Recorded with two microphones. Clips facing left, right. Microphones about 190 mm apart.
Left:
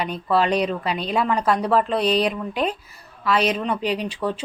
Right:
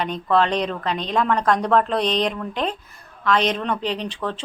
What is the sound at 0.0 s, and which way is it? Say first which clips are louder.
A woman's voice: right 1 dB; 5° left (ahead or behind).